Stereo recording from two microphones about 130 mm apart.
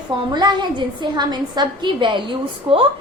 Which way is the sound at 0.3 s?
35° right (ahead or behind).